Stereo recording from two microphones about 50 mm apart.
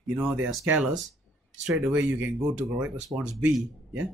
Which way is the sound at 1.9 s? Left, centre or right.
Right.